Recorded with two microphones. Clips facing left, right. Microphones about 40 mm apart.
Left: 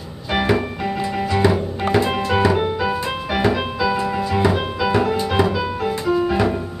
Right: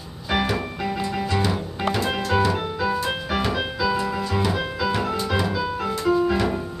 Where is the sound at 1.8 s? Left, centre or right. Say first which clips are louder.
Left 4 dB; left.